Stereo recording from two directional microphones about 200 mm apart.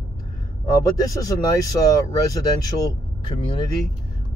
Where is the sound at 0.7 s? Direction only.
20° left (ahead or behind).